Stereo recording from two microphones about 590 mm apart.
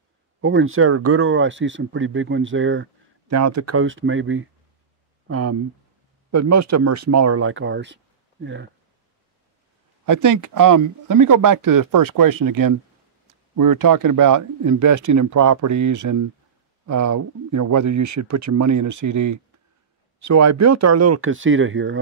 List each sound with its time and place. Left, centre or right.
0.4 s speech: centre
10.0 s speech: right